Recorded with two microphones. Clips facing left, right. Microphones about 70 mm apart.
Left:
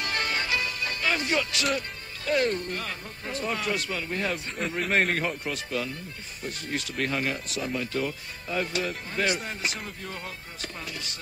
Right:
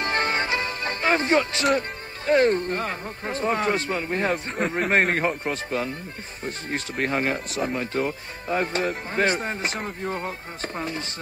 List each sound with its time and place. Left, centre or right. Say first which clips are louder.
0.0 s music: right 5 dB; right
1.7 s speech: right 6 dB; right